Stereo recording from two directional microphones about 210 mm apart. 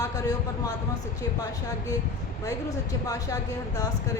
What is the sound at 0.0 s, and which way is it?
A man's voice, 15° left (ahead or behind).